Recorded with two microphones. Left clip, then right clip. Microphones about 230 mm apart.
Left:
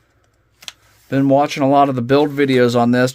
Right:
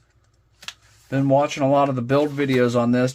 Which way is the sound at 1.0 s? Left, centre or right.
Left.